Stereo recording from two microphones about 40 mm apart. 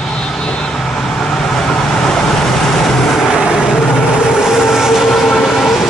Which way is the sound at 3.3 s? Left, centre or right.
Centre.